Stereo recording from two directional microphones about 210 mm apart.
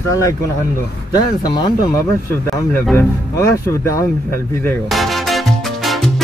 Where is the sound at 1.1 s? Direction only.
20° left (ahead or behind).